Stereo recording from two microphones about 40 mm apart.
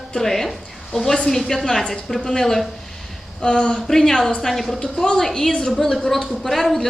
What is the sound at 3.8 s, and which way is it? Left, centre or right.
A woman's voice, centre.